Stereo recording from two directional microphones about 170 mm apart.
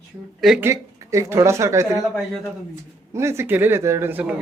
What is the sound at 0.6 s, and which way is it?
Speech, 15° right (ahead or behind).